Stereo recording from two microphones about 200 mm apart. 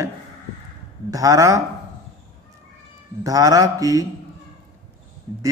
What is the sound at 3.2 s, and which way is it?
Speech, 20° right (ahead or behind).